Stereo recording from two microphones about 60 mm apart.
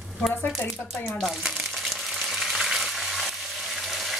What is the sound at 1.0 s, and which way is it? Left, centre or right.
Frying, centre.